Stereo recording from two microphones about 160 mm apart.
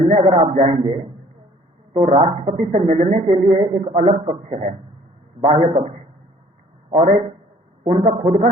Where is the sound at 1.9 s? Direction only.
35° right (ahead or behind).